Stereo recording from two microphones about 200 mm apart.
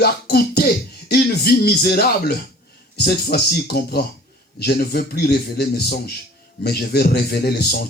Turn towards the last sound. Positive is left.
turn(degrees=50)  # may be behind; listen again after turning